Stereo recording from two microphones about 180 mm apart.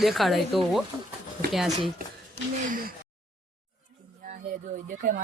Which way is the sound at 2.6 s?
50° right (ahead or behind).